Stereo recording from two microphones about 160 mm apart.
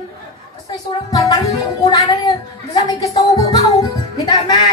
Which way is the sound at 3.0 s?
25° left (ahead or behind).